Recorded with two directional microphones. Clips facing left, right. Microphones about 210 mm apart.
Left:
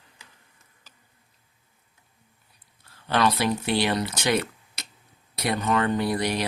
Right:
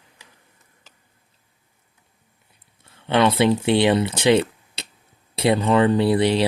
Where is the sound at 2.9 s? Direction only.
25° right (ahead or behind).